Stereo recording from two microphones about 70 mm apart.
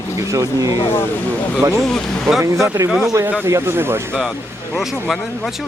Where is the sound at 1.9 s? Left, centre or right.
Centre.